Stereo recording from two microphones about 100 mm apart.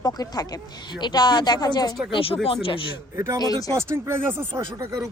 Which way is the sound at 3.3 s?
40° left (ahead or behind).